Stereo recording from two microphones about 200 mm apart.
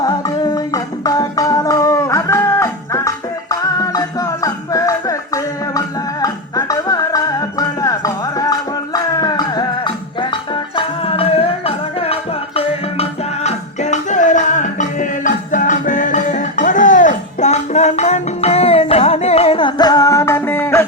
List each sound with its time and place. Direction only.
0.0 s music: 20° left (ahead or behind)